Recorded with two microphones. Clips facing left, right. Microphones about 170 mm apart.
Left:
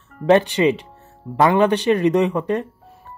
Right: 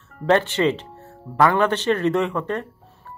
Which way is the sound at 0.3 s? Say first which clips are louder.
Left 3 dB; 15° left (ahead or behind).